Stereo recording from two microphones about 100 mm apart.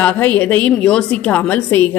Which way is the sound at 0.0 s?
15° left (ahead or behind).